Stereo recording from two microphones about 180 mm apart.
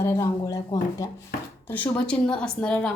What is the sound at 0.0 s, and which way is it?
A woman's voice, 15° left (ahead or behind).